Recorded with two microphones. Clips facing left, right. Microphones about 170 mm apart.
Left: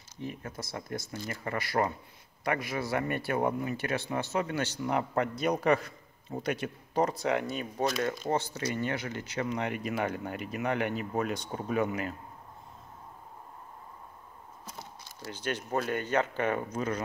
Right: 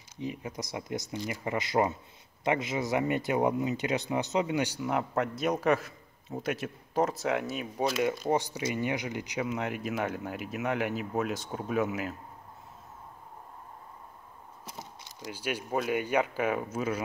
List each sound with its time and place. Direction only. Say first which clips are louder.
0.2 s speech: right 3 dB; 15° right (ahead or behind)
4.8 s a man's voice: even; centre (ahead or behind)
8.3 s speech: right 2 dB; 15° right (ahead or behind)
9.5 s a man's voice: even; centre (ahead or behind)
14.8 s speech: right 1 dB; 15° right (ahead or behind)